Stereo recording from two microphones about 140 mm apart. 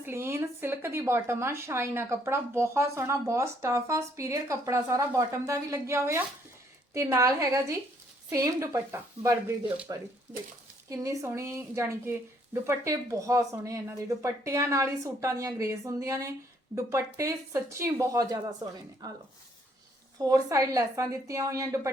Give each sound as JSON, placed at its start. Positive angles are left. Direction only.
{"t": 0.0, "sound": "speech", "side_deg": -15}
{"t": 20.1, "sound": "speech", "side_deg": -25}